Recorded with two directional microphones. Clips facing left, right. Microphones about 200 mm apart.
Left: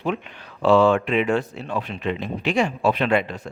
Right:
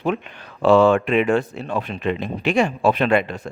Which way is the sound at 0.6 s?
50° right (ahead or behind).